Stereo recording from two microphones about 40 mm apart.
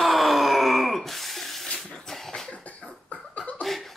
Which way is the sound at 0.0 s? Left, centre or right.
Centre.